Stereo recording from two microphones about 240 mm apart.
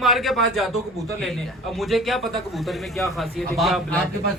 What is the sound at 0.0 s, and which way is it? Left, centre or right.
A man's voice, centre.